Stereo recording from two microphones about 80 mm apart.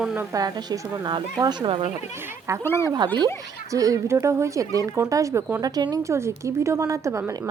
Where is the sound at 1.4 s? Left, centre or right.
Right.